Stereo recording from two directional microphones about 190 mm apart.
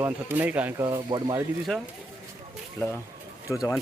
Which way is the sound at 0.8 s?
20° right (ahead or behind).